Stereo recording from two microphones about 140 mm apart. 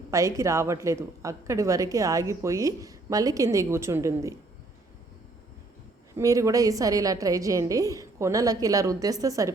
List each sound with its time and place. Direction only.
0.1 s a woman's voice: 20° right (ahead or behind)
6.1 s a woman's voice: 25° right (ahead or behind)